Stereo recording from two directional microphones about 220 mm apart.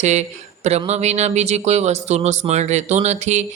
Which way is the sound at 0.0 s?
30° right (ahead or behind).